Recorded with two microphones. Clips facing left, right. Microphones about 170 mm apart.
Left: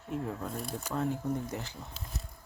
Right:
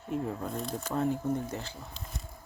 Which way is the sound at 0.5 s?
10° left (ahead or behind).